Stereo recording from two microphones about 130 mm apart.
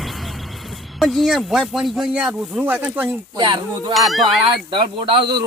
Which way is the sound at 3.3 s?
35° right (ahead or behind).